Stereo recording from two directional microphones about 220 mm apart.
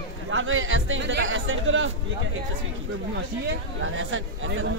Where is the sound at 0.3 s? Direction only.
60° right (ahead or behind).